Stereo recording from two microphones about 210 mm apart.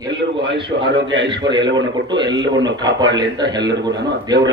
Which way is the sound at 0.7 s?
50° right (ahead or behind).